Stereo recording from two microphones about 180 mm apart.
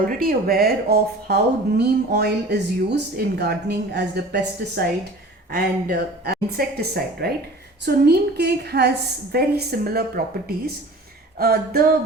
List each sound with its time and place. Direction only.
0.0 s speech: 55° right (ahead or behind)
11.3 s speech: 55° right (ahead or behind)